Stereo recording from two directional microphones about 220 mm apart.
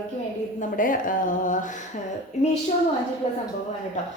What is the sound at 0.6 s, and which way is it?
A woman's voice, 40° left (ahead or behind).